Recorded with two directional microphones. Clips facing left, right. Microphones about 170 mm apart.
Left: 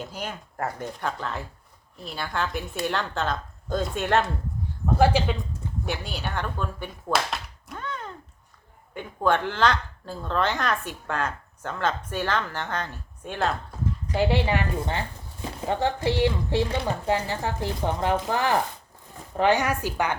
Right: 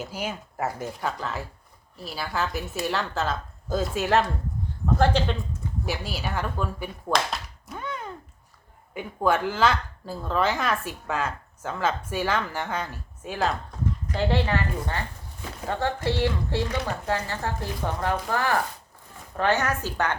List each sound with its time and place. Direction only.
0.0 s speech: 5° right (ahead or behind)
4.9 s speech: 10° left (ahead or behind)
5.8 s speech: 5° right (ahead or behind)
7.1 s a sound: centre (ahead or behind)
7.8 s a sound: 10° right (ahead or behind)
8.9 s speech: 5° right (ahead or behind)
14.1 s a woman's voice: 15° left (ahead or behind)